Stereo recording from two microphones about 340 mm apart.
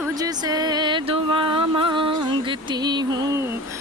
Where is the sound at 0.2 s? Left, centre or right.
Centre.